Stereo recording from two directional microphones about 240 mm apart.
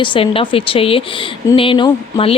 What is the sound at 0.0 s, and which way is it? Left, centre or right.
Speech, left.